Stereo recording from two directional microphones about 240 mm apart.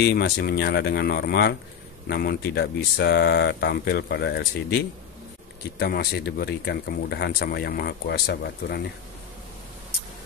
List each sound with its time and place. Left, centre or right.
0.0 s speech: left
5.8 s speech: left